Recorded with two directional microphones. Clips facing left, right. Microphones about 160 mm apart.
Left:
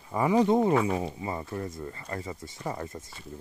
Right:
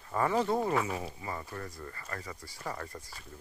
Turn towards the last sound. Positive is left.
turn(degrees=20)  # may be behind; listen again after turning